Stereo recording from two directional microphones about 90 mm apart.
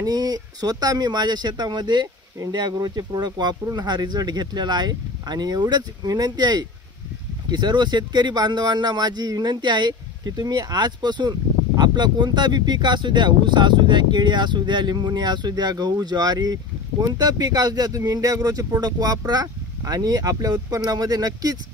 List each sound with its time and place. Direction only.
0.0 s speech: 45° right (ahead or behind)